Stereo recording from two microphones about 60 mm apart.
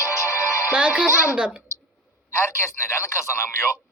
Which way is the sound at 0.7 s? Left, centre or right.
Centre.